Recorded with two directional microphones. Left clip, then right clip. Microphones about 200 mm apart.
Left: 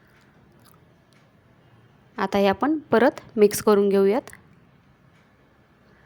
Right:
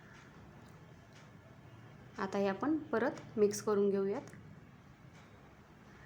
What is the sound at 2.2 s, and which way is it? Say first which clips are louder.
A woman's voice: left 14 dB; 45° left (ahead or behind).